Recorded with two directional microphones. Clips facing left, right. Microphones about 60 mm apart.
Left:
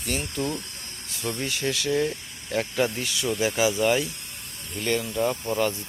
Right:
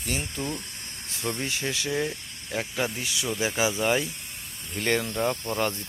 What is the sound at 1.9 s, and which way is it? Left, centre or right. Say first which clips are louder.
Speech: left 4 dB; centre.